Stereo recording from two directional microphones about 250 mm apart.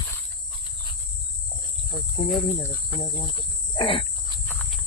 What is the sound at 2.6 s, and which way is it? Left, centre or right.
Cricket, centre.